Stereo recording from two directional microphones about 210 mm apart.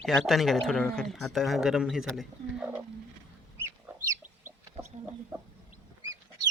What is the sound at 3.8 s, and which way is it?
Chicken, 10° right (ahead or behind).